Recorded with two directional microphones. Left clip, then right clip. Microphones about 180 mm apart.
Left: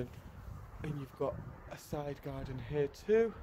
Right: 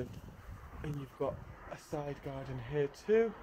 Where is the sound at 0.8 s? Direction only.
15° left (ahead or behind).